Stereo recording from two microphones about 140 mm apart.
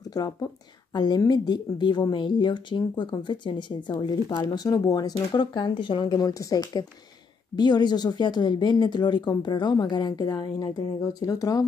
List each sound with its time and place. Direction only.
0.1 s speech: 25° left (ahead or behind)